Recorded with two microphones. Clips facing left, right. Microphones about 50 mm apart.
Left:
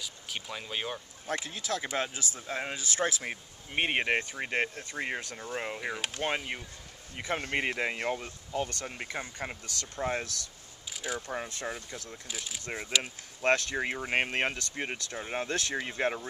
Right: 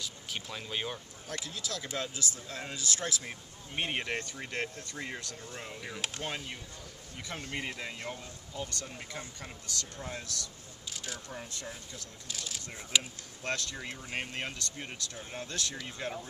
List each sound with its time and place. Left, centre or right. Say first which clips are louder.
0.0 s speech: left 1 dB; centre
1.4 s speech: left 5 dB; left
10.9 s a sound: left 6 dB; centre
11.6 s speech: left 7 dB; left
12.3 s speech: even; centre
13.0 s speech: left 9 dB; left